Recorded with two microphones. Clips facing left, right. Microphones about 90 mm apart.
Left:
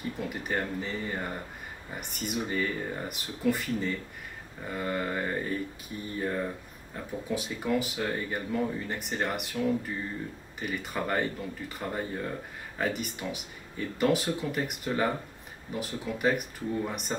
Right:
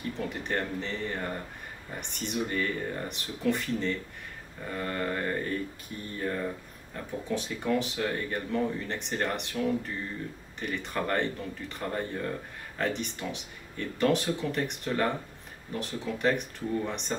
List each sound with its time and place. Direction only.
0.2 s speech: 5° left (ahead or behind)